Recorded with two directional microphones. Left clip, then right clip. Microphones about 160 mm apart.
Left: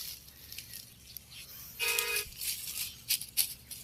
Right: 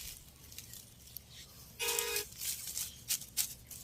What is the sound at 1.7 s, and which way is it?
Music, 55° right (ahead or behind).